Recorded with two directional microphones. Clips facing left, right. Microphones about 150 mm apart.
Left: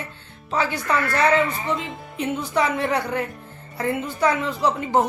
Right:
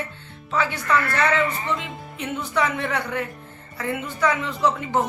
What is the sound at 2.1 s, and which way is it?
A woman's voice, 35° left (ahead or behind).